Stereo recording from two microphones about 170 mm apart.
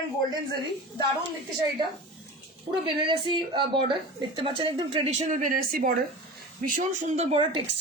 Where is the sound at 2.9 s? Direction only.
30° right (ahead or behind).